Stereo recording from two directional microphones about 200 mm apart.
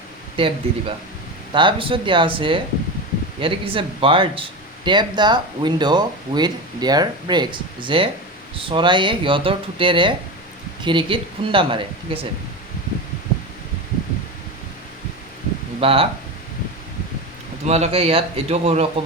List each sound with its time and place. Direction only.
0.3 s speech: 25° right (ahead or behind)
15.8 s speech: 30° right (ahead or behind)
17.7 s a man's voice: 35° right (ahead or behind)